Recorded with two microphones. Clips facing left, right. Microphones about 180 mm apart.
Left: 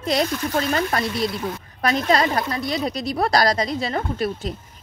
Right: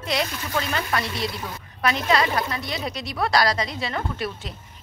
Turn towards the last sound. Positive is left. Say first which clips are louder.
# left 5 dB
turn(degrees=40)  # may be behind; listen again after turning